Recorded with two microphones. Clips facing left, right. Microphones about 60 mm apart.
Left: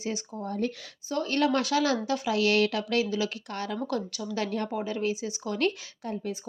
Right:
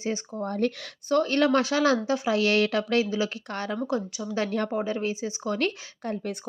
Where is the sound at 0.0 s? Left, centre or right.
Right.